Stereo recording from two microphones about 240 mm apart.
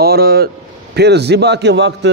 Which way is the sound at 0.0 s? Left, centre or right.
Right.